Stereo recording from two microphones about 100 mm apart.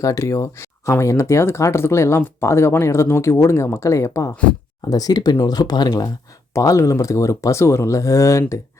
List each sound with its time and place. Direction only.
0.0 s speech: 30° left (ahead or behind)
6.5 s speech: 30° left (ahead or behind)